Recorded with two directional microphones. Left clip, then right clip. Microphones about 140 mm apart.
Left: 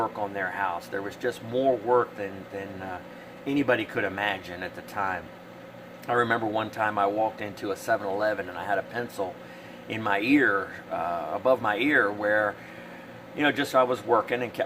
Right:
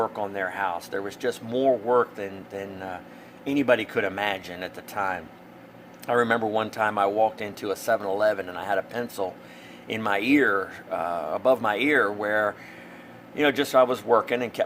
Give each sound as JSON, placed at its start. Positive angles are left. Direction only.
{"t": 0.0, "sound": "speech", "side_deg": -55}